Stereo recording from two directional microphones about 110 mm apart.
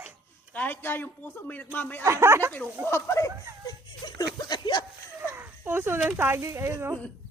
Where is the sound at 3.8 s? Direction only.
40° left (ahead or behind).